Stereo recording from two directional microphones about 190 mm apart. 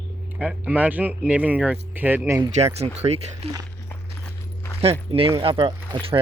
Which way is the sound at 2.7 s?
35° right (ahead or behind).